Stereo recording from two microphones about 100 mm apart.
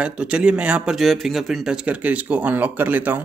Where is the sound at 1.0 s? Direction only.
Centre (ahead or behind); by 3.2 s 20° right (ahead or behind).